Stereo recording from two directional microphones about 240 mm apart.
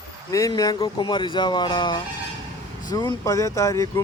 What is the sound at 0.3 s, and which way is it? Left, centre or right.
Speech, centre.